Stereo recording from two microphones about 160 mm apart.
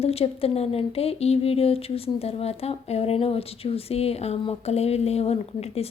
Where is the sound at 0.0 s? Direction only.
40° left (ahead or behind).